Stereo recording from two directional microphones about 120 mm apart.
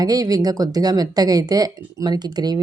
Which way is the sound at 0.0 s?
30° right (ahead or behind).